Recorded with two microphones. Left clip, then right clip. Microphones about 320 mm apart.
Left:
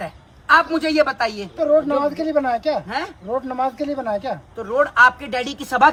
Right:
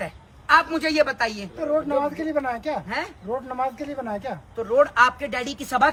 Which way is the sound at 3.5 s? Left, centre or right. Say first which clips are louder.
Left 5 dB; left.